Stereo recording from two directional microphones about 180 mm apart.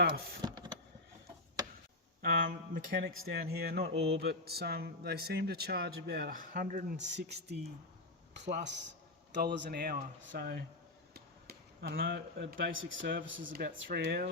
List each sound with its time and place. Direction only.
0.4 s vehicle: 25° right (ahead or behind)
2.2 s speech: 55° right (ahead or behind)
8.4 s a man's voice: 80° right; by 13.2 s 55° right (ahead or behind)
13.2 s speech: 90° right
13.5 s speech: 50° right (ahead or behind)
13.7 s speech: 65° right (ahead or behind)